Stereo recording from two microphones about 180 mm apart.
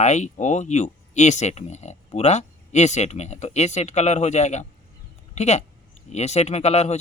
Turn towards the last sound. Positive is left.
turn(degrees=35)  # may be behind; listen again after turning